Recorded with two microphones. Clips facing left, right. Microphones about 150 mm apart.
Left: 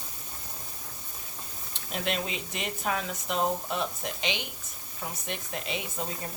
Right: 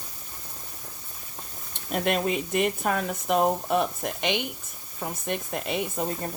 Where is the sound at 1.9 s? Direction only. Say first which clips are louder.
Right 7 dB; 50° right (ahead or behind).